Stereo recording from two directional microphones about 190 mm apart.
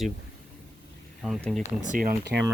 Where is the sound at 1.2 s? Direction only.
5° left (ahead or behind).